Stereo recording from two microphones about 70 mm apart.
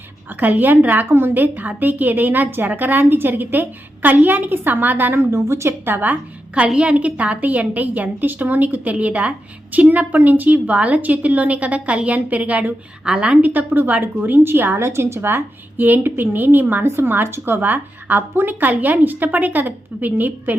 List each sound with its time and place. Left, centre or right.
0.3 s a woman's voice: right
5.3 s a woman's voice: right; by 13.5 s centre
13.5 s a woman's voice: right